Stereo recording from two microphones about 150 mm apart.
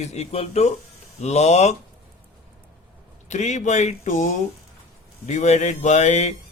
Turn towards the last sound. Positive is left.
turn(degrees=50)  # may be behind; listen again after turning